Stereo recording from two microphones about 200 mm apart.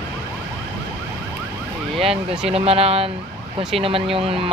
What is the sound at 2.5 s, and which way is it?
Speech, 30° right (ahead or behind).